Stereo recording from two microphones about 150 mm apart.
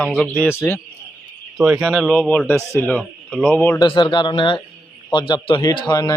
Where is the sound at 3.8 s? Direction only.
30° left (ahead or behind).